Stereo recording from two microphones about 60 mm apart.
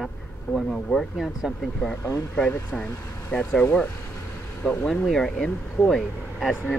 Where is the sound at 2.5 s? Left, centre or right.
Left.